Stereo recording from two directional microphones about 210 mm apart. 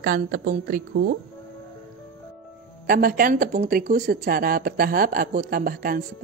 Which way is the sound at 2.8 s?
45° right (ahead or behind).